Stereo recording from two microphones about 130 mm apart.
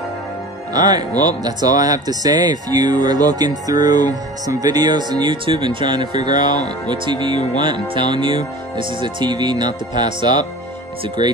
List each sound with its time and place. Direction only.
0.7 s speech: 30° right (ahead or behind)